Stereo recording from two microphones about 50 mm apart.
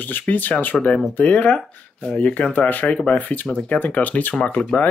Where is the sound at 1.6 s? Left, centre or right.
Left.